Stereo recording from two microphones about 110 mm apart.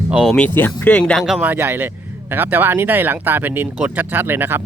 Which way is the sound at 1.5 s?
15° right (ahead or behind).